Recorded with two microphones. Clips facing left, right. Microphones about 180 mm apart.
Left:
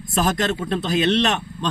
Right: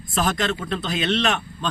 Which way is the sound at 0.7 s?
35° left (ahead or behind).